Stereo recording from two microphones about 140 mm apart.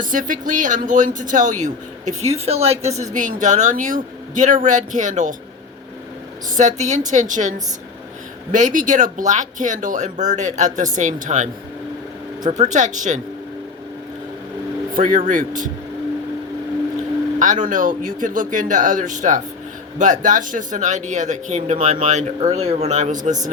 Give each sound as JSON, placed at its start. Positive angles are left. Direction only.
{"t": 0.0, "sound": "speech", "side_deg": -70}
{"t": 6.6, "sound": "speech", "side_deg": -55}
{"t": 8.5, "sound": "speech", "side_deg": -65}
{"t": 12.5, "sound": "speech", "side_deg": -60}
{"t": 14.9, "sound": "speech", "side_deg": -70}
{"t": 17.4, "sound": "speech", "side_deg": -65}